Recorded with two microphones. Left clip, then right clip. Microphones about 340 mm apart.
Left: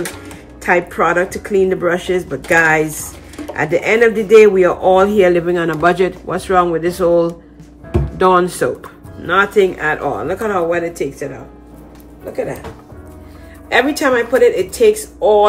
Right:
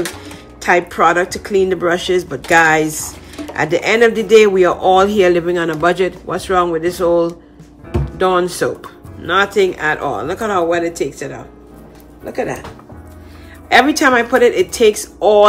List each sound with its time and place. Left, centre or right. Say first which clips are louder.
0.6 s speech: right 1 dB; centre
13.7 s speech: right 3 dB; centre